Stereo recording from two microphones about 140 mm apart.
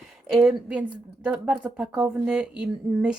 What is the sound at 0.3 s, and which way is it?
Speech, 5° right (ahead or behind).